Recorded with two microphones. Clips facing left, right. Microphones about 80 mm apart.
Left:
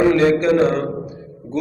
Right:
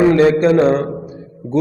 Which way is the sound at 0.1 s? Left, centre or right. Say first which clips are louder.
Right 3 dB; right.